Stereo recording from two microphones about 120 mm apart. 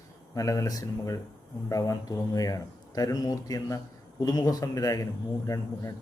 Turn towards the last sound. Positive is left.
turn(degrees=30)  # may be behind; listen again after turning